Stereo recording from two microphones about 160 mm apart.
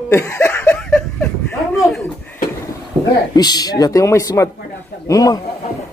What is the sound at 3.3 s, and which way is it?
A man's voice, 25° left (ahead or behind).